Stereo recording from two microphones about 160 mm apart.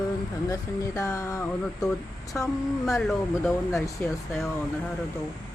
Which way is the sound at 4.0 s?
10° left (ahead or behind).